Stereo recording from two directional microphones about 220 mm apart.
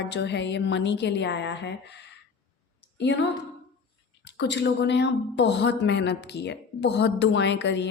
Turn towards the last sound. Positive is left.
turn(degrees=55)  # may be behind; listen again after turning